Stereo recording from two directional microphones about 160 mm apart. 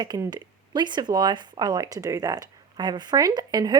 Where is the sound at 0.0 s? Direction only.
25° right (ahead or behind).